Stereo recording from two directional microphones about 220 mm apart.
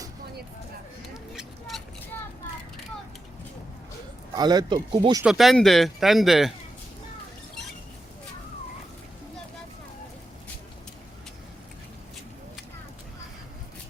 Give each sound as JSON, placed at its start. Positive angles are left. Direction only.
{"t": 1.1, "sound": "vehicle", "side_deg": 0}
{"t": 4.4, "sound": "speech", "side_deg": -20}
{"t": 5.2, "sound": "speech", "side_deg": 0}